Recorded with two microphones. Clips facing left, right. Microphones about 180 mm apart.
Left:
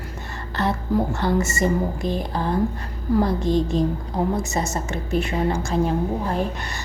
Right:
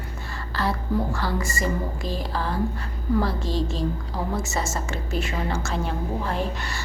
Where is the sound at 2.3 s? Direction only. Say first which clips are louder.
Left 3 dB; 20° left (ahead or behind).